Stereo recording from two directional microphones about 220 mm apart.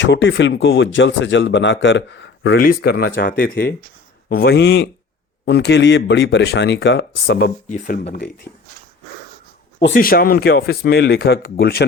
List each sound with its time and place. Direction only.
0.0 s speech: 55° left (ahead or behind)
9.8 s speech: 45° left (ahead or behind)